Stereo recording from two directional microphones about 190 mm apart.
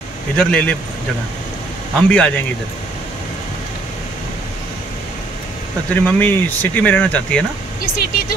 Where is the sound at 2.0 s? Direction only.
5° left (ahead or behind).